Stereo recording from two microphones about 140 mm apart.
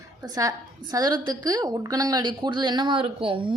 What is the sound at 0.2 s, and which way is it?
A woman's voice, 25° right (ahead or behind).